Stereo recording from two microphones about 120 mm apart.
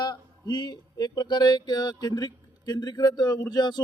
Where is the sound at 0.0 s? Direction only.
40° left (ahead or behind).